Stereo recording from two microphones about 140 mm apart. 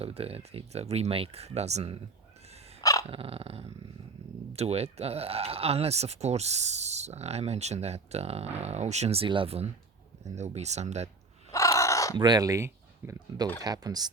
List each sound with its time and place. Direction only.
0.0 s speech: 45° right (ahead or behind)
2.8 s dog: 25° left (ahead or behind)
3.1 s speech: 40° right (ahead or behind)
10.3 s speech: 55° right (ahead or behind)
11.5 s crow: 20° left (ahead or behind)
12.1 s speech: 30° right (ahead or behind)